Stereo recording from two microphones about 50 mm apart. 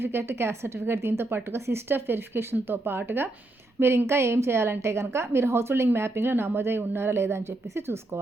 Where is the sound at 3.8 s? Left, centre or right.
Right.